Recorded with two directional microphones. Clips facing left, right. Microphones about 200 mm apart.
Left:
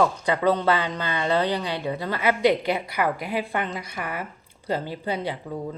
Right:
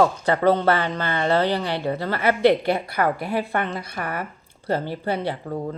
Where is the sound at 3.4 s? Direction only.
15° left (ahead or behind).